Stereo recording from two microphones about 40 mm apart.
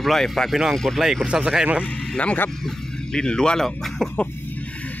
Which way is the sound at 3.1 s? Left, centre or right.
Centre.